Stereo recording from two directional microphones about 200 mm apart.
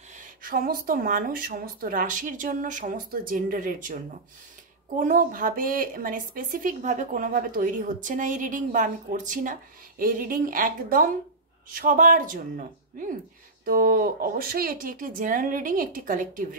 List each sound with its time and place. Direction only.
0.4 s a woman's voice: 45° right (ahead or behind)
13.7 s speech: 45° right (ahead or behind)